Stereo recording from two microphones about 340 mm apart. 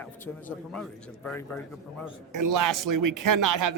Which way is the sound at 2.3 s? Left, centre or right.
Right.